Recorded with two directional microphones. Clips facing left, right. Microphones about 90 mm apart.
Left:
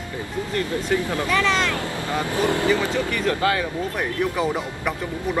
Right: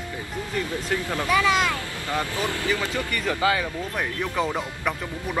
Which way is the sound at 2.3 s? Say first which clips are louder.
Left 6 dB; 55° left (ahead or behind).